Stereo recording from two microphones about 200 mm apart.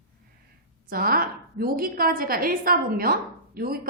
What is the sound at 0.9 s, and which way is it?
A woman's voice, 45° right (ahead or behind).